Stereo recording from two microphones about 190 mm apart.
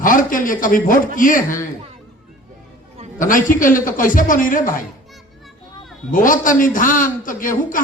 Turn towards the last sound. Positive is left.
turn(degrees=45)  # may be behind; listen again after turning